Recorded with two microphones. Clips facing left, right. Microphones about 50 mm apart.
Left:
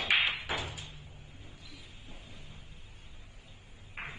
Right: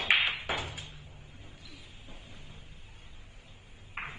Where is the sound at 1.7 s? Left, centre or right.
Right.